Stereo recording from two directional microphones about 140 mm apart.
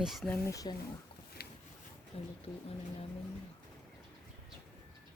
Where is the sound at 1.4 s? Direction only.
90° left.